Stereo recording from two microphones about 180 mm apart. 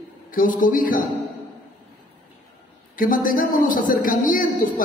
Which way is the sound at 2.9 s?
50° left (ahead or behind).